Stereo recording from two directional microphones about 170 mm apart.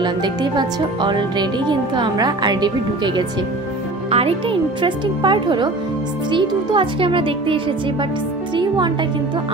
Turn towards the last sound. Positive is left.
turn(degrees=-30)  # may be behind; listen again after turning